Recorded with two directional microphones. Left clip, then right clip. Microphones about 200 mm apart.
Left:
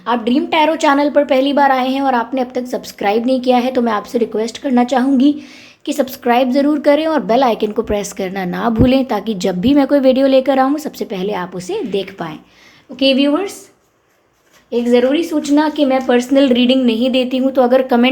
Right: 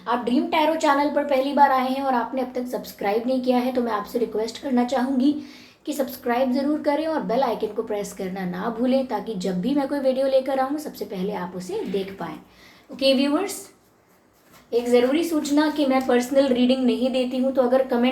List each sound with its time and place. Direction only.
0.0 s a woman's voice: 50° left (ahead or behind)
14.7 s a woman's voice: 50° left (ahead or behind)